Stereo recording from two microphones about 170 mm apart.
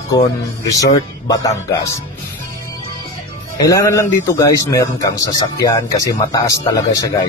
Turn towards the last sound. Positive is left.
turn(degrees=20)  # may be behind; listen again after turning